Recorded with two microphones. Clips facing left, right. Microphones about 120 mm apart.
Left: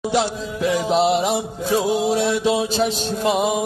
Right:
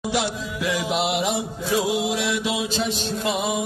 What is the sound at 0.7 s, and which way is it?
Music, 35° left (ahead or behind).